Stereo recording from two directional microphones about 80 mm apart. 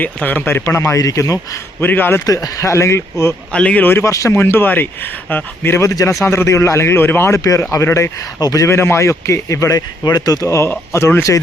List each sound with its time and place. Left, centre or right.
0.0 s a man's voice: left
0.6 s a man's voice: left
1.8 s a man's voice: left
2.2 s a man's voice: left
3.5 s speech: centre
4.0 s a man's voice: left
4.4 s a man's voice: left
5.6 s a man's voice: left
8.4 s speech: left
8.6 s a man's voice: left
10.4 s a man's voice: left